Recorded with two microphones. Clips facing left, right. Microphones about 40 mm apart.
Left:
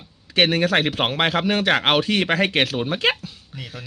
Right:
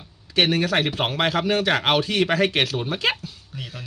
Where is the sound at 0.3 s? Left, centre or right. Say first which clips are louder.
Left 2 dB; left.